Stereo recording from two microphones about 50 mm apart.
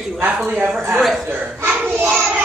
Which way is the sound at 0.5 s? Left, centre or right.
Centre.